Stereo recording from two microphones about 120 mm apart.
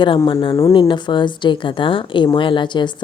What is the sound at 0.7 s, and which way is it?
A woman's voice, 45° left (ahead or behind).